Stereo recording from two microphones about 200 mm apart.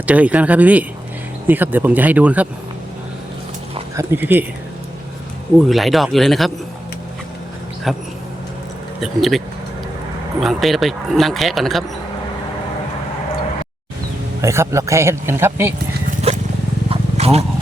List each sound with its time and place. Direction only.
0.0 s speech: 5° right (ahead or behind)
3.9 s speech: 10° right (ahead or behind)
5.6 s speech: centre (ahead or behind)
7.9 s speech: centre (ahead or behind)
10.4 s speech: centre (ahead or behind)
14.4 s speech: 15° right (ahead or behind)
16.3 s a sound: 30° right (ahead or behind)
16.9 s wild animals: 30° right (ahead or behind)